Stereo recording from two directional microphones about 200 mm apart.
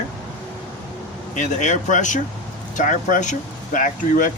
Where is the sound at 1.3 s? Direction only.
40° left (ahead or behind).